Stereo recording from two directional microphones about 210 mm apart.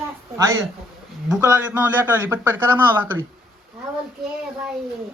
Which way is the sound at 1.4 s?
10° right (ahead or behind).